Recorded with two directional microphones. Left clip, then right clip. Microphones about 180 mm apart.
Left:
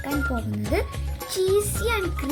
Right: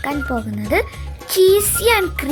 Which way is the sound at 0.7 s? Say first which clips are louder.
Right 9 dB; 40° right (ahead or behind).